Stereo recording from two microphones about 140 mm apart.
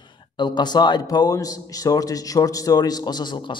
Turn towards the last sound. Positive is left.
turn(degrees=35)  # may be behind; listen again after turning